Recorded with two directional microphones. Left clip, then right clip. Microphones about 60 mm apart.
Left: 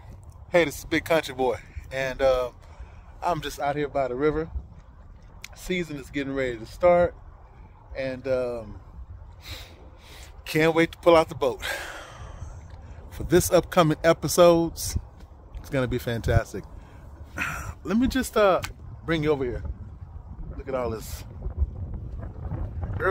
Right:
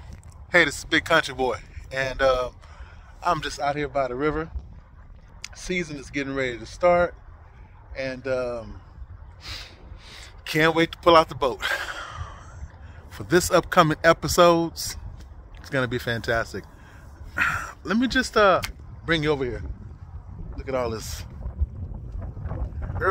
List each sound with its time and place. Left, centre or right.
0.5 s speech: left
3.6 s speech: left
6.9 s speech: centre
9.4 s a sound: left
13.1 s speech: left
17.4 s a sound: left
17.9 s speech: left
18.7 s speech: left
20.5 s a sound: centre
20.8 s speech: left